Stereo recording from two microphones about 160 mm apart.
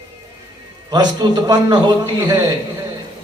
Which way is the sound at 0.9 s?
25° right (ahead or behind).